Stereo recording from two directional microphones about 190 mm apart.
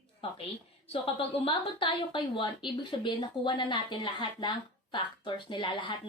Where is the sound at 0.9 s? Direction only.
30° left (ahead or behind).